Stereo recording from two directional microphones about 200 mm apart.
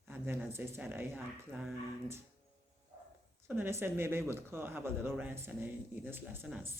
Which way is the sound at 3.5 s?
10° right (ahead or behind).